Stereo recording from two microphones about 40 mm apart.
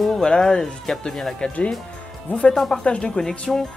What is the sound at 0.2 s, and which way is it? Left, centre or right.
Speech, left.